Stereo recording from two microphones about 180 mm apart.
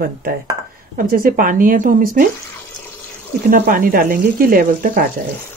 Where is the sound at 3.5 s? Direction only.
50° right (ahead or behind).